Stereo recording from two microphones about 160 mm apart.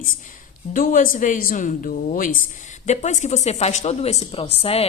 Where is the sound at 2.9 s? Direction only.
45° left (ahead or behind).